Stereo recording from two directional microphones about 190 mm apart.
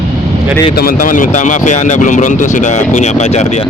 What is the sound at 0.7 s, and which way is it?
Speech, 50° left (ahead or behind).